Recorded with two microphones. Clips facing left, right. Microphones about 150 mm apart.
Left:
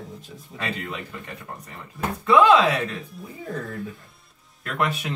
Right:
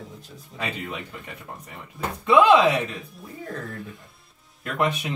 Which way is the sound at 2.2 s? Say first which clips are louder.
Even; 20° right (ahead or behind).